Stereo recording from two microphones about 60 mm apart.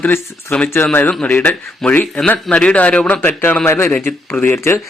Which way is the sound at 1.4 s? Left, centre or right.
Left.